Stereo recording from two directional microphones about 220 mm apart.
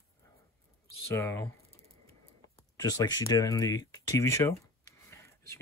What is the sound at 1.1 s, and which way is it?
Speech, 10° left (ahead or behind).